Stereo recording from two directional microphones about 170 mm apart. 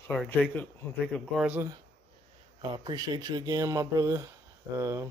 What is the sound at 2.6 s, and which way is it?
Speech, 25° right (ahead or behind).